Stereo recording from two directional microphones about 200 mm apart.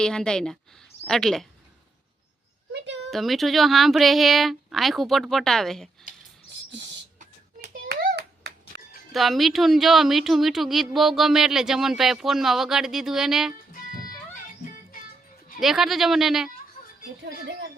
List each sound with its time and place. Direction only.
0.0 s a woman's voice: 5° left (ahead or behind)
3.1 s a woman's voice: centre (ahead or behind)
7.9 s clapping: 55° right (ahead or behind)
9.1 s a woman's voice: centre (ahead or behind)
15.6 s a woman's voice: centre (ahead or behind)